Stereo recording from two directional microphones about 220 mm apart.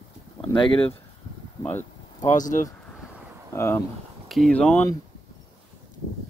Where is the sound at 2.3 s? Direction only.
35° left (ahead or behind).